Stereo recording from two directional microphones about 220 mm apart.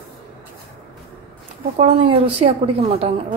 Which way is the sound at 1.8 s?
25° right (ahead or behind).